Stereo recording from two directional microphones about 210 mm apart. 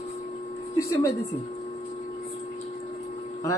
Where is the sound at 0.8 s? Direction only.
15° left (ahead or behind).